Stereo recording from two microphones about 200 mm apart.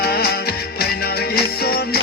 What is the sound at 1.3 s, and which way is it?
Music, 50° left (ahead or behind).